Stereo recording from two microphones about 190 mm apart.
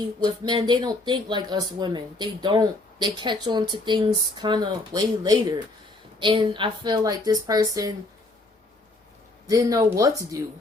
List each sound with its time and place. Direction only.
0.0 s speech: 20° right (ahead or behind)
9.5 s speech: 20° right (ahead or behind)